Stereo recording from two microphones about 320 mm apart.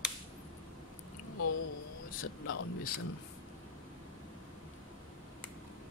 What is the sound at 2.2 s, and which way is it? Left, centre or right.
Speech, left.